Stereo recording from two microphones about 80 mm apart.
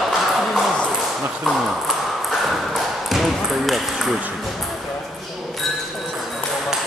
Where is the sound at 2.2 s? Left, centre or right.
Centre.